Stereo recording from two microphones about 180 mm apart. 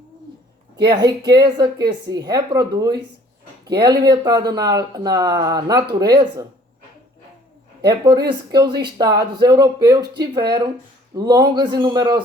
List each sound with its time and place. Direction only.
1.5 s speech: 25° right (ahead or behind)
7.9 s speech: 20° right (ahead or behind)